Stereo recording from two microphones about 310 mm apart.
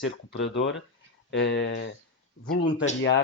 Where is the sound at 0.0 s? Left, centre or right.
Left.